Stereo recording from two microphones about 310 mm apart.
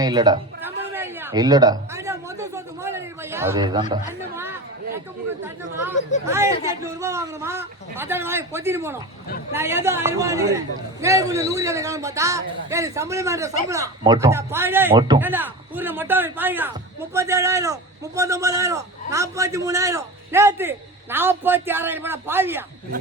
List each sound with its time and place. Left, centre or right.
0.0 s a sound: centre
6.0 s speech: left
6.2 s a man's voice: centre